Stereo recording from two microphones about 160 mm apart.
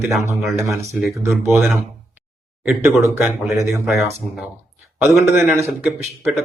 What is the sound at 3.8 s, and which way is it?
Speech, centre (ahead or behind).